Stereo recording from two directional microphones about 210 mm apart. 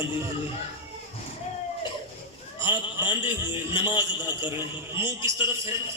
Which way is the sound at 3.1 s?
25° left (ahead or behind).